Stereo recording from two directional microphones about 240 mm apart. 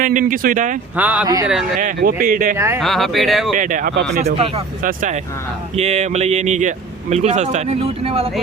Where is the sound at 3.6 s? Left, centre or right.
Right.